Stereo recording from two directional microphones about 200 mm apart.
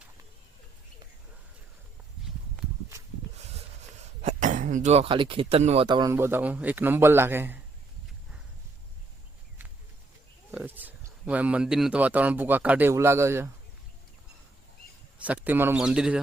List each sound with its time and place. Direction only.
4.2 s speech: 35° right (ahead or behind); by 7.6 s 10° right (ahead or behind)
10.5 s speech: 5° right (ahead or behind)
15.2 s a man's voice: 5° right (ahead or behind)